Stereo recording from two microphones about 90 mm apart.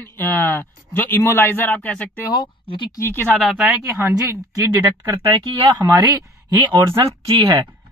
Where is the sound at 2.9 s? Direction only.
30° left (ahead or behind).